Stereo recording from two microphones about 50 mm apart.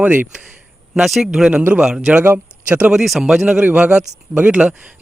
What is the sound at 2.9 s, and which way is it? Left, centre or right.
Speech, centre.